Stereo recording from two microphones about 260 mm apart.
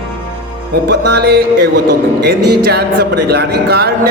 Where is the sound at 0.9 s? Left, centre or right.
Right.